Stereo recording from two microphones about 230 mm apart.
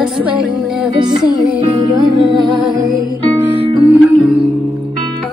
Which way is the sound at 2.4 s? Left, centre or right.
Right.